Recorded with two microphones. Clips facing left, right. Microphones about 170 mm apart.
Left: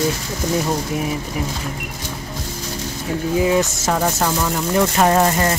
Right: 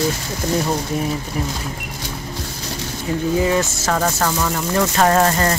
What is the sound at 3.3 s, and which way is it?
Speech, 10° left (ahead or behind).